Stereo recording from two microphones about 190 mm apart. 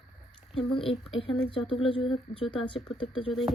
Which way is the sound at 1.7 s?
30° left (ahead or behind).